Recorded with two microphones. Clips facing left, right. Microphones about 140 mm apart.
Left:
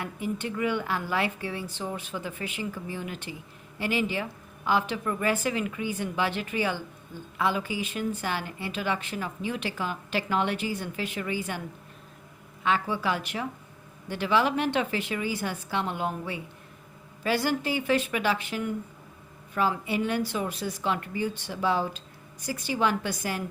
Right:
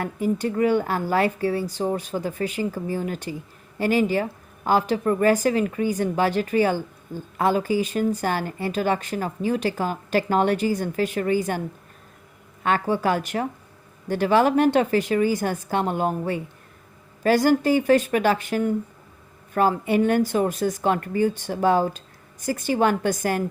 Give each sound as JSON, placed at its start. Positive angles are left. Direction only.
{"t": 0.0, "sound": "a woman's voice", "side_deg": -40}
{"t": 12.6, "sound": "speech", "side_deg": -45}